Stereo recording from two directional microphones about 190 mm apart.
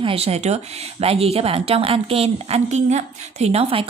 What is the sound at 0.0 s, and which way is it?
A woman's voice, 30° right (ahead or behind).